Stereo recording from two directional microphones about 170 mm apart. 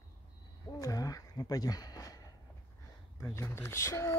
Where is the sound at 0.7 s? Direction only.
20° left (ahead or behind).